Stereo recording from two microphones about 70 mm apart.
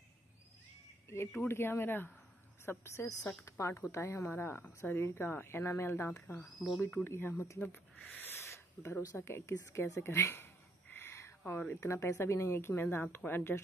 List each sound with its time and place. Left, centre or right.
1.0 s speech: left
6.4 s speech: centre
7.1 s speech: left
7.6 s speech: left
8.3 s a sound: left
9.1 s speech: left
10.2 s a sound: left
11.8 s speech: left